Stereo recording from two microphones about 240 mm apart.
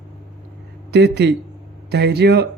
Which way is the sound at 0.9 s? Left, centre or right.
Right.